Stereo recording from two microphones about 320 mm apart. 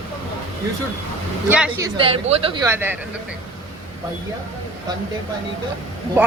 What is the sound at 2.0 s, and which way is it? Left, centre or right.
Speech, centre.